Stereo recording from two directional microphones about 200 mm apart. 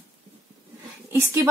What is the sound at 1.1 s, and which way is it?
Speech, 10° right (ahead or behind).